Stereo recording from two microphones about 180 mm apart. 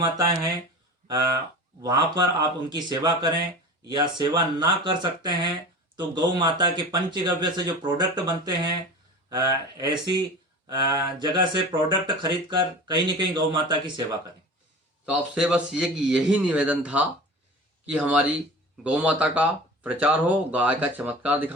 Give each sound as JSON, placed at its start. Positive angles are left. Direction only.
{"t": 0.0, "sound": "speech", "side_deg": -20}
{"t": 15.1, "sound": "a man's voice", "side_deg": -5}